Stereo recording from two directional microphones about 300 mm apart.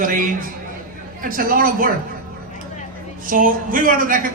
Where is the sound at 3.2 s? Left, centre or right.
Right.